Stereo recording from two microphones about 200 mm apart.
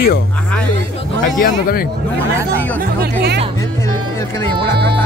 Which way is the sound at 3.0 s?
55° right (ahead or behind).